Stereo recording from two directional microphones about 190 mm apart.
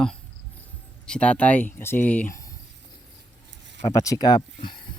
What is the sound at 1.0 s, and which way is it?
Speech, 5° left (ahead or behind).